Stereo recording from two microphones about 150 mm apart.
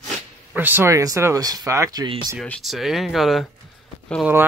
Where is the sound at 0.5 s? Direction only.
10° right (ahead or behind).